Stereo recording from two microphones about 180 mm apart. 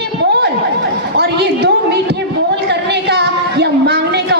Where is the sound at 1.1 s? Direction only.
65° right (ahead or behind).